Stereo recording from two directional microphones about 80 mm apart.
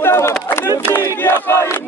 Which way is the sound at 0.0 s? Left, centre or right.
Left.